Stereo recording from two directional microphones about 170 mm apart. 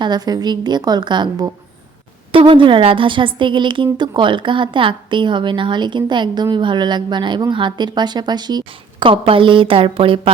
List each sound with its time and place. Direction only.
0.0 s a woman's voice: 25° right (ahead or behind)